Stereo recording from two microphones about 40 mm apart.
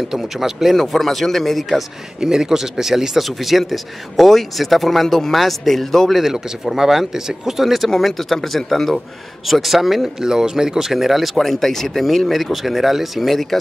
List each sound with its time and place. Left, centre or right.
0.1 s speech: centre
0.7 s speech: centre
2.2 s speech: centre
6.3 s speech: centre
9.5 s speech: centre